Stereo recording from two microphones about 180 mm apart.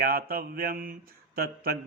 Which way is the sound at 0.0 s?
55° right (ahead or behind).